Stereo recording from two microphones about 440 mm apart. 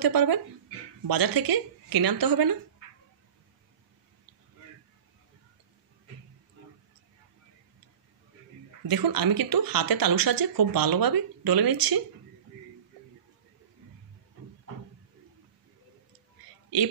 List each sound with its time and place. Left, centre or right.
0.0 s speech: right
8.8 s speech: right